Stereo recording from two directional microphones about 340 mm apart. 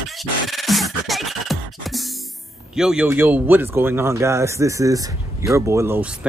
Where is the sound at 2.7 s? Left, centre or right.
Centre.